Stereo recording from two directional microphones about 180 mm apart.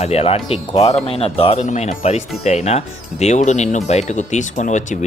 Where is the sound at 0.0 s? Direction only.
35° left (ahead or behind).